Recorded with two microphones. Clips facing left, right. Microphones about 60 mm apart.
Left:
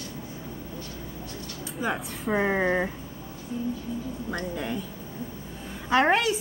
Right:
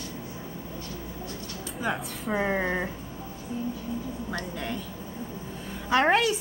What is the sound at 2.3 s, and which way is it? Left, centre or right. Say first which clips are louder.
Speech: left 3 dB; centre.